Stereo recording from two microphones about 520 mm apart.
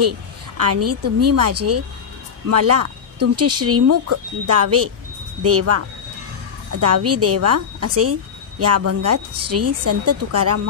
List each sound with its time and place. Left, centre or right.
0.6 s a woman's voice: right